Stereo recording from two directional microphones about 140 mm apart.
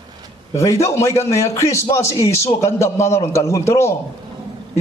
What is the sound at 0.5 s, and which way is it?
Speech, 20° left (ahead or behind).